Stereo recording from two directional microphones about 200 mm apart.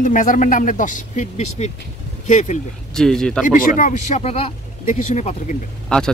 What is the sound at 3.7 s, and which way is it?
Speech, 35° left (ahead or behind).